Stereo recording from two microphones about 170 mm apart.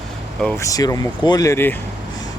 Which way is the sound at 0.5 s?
20° left (ahead or behind).